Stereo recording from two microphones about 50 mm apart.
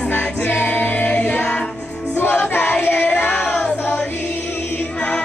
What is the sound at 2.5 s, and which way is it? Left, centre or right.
Singing, left.